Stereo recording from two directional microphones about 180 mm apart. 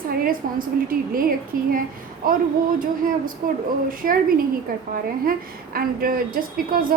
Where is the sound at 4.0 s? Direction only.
50° right (ahead or behind).